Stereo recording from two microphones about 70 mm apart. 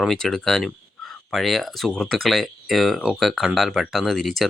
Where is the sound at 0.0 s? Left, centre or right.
Centre.